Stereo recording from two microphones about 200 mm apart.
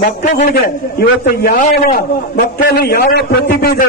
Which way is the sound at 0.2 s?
40° left (ahead or behind).